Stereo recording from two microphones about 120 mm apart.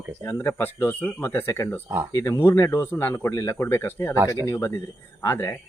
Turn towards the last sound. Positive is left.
turn(degrees=20)  # may be behind; listen again after turning